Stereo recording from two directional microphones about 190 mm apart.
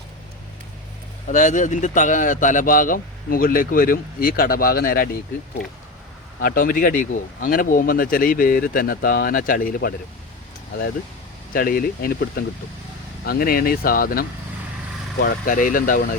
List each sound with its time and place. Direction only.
1.3 s speech: 40° left (ahead or behind)
6.4 s speech: 50° left (ahead or behind)
11.5 s speech: 50° left (ahead or behind)